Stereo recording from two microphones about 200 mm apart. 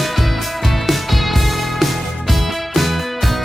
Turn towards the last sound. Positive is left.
turn(degrees=0)  # may be behind; listen again after turning